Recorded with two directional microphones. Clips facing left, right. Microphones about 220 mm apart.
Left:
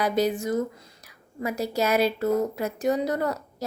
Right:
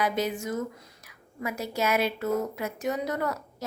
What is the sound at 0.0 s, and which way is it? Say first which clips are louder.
A woman's voice: left 4 dB; 35° left (ahead or behind).